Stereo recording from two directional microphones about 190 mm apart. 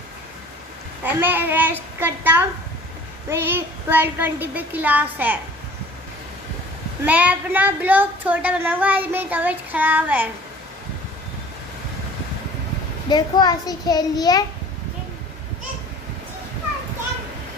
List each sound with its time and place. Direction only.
1.0 s speech: 10° right (ahead or behind)
7.1 s speech: 10° right (ahead or behind)
13.1 s a child's voice: 20° left (ahead or behind)